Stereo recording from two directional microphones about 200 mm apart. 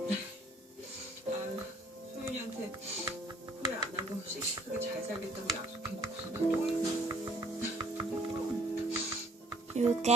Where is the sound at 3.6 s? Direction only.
20° right (ahead or behind).